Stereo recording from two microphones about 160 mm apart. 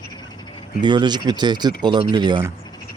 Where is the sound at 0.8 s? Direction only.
30° right (ahead or behind).